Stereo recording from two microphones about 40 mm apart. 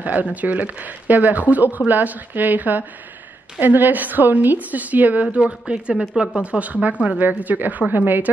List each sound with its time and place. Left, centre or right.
0.0 s a woman's voice: right
5.4 s speech: right
7.2 s a woman's voice: right